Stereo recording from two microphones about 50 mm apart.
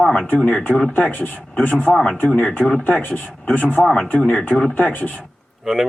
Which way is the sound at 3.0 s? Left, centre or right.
Left.